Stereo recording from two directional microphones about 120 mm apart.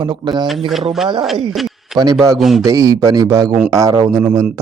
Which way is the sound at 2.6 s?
30° right (ahead or behind).